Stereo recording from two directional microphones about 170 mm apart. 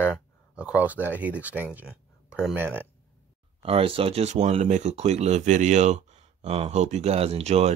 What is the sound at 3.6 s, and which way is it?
Speech, 35° right (ahead or behind).